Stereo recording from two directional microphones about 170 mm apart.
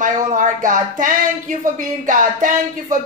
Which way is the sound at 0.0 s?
50° right (ahead or behind).